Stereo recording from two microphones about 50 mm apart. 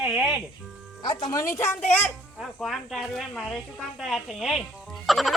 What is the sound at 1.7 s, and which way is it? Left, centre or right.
Speech, left.